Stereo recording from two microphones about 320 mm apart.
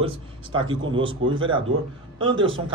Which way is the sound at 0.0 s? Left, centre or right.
Centre.